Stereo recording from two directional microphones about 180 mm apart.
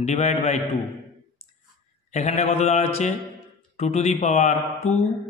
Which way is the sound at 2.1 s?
40° left (ahead or behind).